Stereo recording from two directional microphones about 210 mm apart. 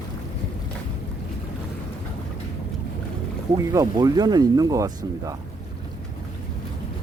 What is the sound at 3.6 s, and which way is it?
Speech, 15° right (ahead or behind).